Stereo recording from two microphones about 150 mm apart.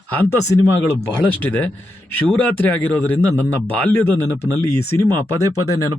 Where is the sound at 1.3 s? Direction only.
10° left (ahead or behind).